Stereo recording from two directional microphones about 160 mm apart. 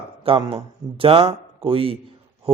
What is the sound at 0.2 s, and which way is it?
A man's voice, 35° right (ahead or behind).